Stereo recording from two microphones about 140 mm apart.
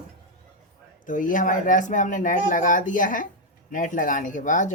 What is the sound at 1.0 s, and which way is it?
Speech, 70° left (ahead or behind).